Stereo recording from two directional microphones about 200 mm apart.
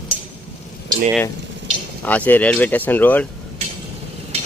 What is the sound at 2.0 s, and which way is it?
Speech, 10° left (ahead or behind).